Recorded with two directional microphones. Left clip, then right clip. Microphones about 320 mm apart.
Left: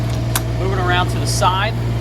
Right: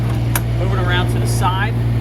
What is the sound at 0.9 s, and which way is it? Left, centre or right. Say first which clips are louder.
Speech: left 2 dB; centre.